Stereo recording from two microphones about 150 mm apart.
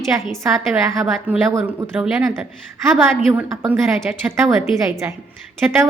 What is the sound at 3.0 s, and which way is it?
A woman's voice, 15° right (ahead or behind).